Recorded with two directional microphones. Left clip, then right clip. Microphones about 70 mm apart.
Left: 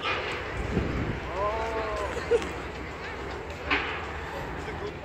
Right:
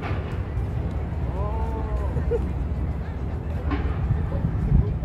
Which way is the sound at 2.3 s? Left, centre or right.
Centre.